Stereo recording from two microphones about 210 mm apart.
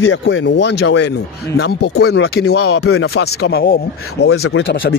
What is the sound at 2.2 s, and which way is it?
Speech, 50° left (ahead or behind).